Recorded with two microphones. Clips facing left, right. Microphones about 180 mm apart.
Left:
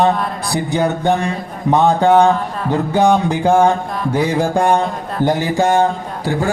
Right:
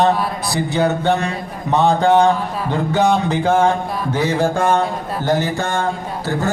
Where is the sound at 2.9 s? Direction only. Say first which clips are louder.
Left 2 dB; 10° left (ahead or behind).